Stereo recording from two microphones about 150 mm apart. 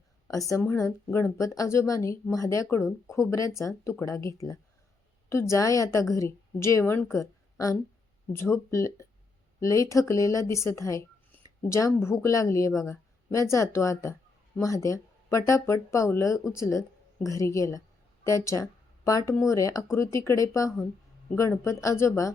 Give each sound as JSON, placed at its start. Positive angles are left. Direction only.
{"t": 0.3, "sound": "a woman's voice", "side_deg": 20}